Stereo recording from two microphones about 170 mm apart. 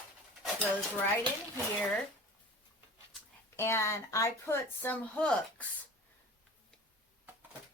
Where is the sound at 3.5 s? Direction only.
15° left (ahead or behind).